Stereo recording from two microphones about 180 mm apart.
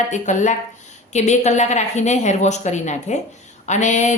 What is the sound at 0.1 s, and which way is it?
A woman's voice, 45° left (ahead or behind).